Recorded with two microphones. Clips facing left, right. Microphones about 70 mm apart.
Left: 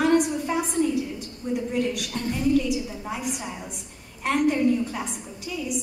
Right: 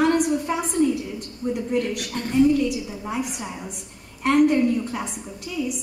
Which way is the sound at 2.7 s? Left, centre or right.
Centre.